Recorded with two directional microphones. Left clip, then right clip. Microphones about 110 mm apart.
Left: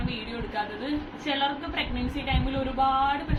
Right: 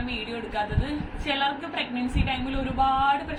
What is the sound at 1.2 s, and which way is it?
Speech, 20° right (ahead or behind).